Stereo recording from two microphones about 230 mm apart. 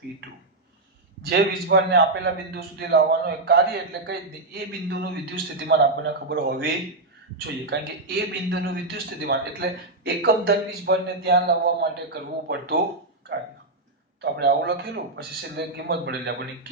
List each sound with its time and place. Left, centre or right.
1.2 s a man's voice: right
14.2 s a man's voice: right